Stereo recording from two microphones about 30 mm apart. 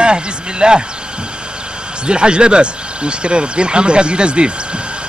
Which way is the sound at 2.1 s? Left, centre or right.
Right.